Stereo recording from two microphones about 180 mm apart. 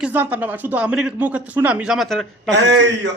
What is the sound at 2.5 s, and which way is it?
Speech, 75° right (ahead or behind).